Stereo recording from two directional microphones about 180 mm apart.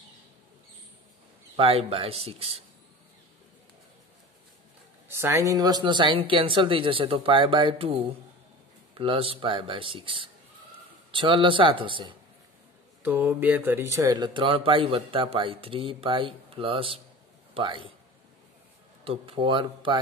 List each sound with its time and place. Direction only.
1.6 s speech: 30° right (ahead or behind)
5.0 s speech: 15° right (ahead or behind)
13.0 s speech: 10° right (ahead or behind); by 17.9 s 30° right (ahead or behind)
19.0 s speech: 30° right (ahead or behind)